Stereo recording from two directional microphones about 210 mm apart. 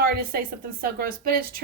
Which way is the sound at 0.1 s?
45° right (ahead or behind).